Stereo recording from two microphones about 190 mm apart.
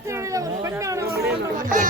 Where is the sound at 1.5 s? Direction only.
45° right (ahead or behind).